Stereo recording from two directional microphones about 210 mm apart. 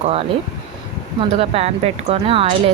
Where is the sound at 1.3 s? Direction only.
30° right (ahead or behind).